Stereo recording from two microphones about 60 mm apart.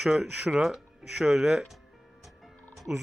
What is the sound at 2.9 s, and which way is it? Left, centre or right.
Speech, right.